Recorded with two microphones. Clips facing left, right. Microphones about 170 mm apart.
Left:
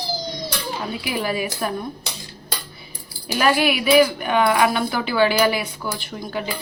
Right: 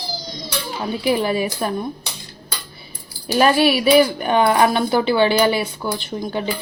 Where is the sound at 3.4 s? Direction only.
30° right (ahead or behind).